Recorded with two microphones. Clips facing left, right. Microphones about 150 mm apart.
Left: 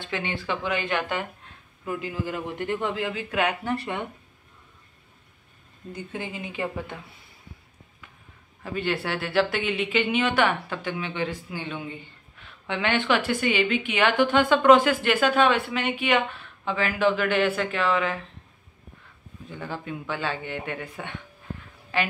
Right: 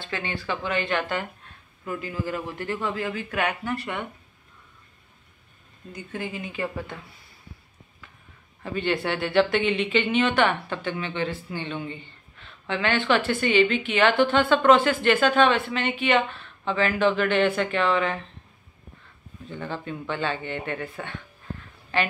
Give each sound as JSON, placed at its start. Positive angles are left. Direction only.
{"t": 0.0, "sound": "speech", "side_deg": 20}
{"t": 6.1, "sound": "speech", "side_deg": 20}
{"t": 8.6, "sound": "speech", "side_deg": 5}
{"t": 19.5, "sound": "speech", "side_deg": 10}